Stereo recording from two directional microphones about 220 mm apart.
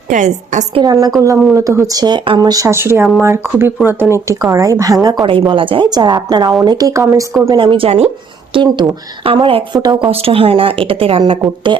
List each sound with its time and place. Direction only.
0.1 s a woman's voice: 35° right (ahead or behind)
0.8 s a woman's voice: 15° right (ahead or behind)